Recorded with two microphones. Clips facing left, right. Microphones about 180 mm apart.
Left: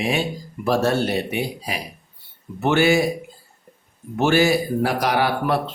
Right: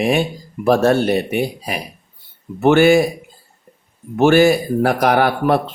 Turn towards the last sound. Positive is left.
turn(degrees=-55)  # may be behind; listen again after turning